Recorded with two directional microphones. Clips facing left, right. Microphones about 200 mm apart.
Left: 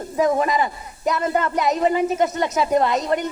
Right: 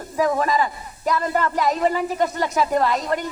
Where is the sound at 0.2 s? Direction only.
20° left (ahead or behind).